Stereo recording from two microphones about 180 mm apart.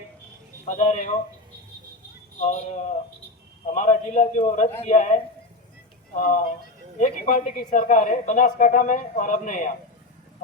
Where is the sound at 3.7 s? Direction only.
40° left (ahead or behind).